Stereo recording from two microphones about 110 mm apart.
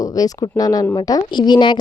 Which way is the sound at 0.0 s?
35° left (ahead or behind).